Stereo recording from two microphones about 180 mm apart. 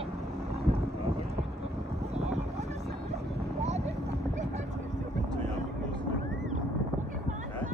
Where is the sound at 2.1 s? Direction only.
40° right (ahead or behind).